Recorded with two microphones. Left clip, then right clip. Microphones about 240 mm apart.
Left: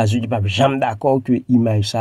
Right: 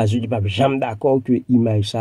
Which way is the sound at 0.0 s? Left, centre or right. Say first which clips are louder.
Left 1 dB; left.